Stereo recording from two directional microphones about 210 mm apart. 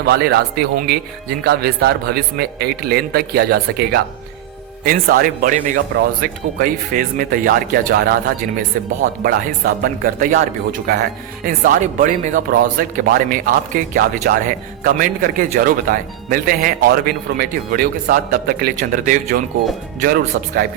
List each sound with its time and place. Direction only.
0.0 s speech: 50° right (ahead or behind)